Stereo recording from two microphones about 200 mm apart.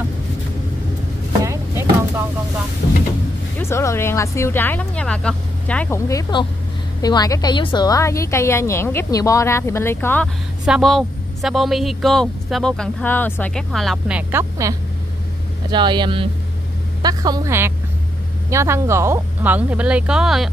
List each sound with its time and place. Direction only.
1.4 s vehicle: 15° right (ahead or behind)
3.5 s a woman's voice: 15° left (ahead or behind); by 20.4 s centre (ahead or behind)